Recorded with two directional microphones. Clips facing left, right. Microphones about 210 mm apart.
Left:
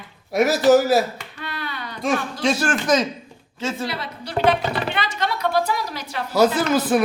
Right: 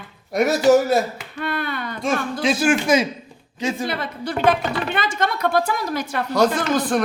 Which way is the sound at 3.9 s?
50° right (ahead or behind).